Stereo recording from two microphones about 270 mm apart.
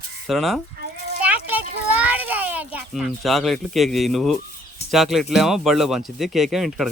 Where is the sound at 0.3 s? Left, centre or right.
Centre.